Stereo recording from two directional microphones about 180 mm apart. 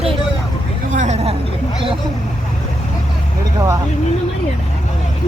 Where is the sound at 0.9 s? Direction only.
40° right (ahead or behind).